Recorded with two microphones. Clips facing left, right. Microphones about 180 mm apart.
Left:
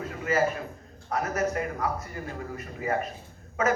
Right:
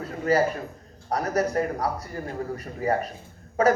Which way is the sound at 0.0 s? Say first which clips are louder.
Right 4 dB; 35° right (ahead or behind).